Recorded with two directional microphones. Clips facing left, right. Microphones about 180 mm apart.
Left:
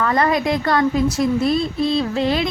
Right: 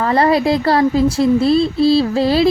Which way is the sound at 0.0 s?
30° right (ahead or behind).